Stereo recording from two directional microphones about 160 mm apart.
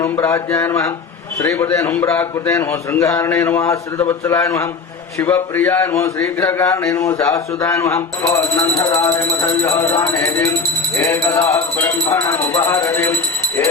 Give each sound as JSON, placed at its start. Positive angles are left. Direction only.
{"t": 0.0, "sound": "a man's voice", "side_deg": 20}